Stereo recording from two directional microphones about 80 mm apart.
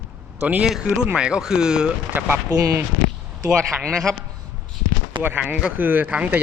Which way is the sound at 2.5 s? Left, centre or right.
Right.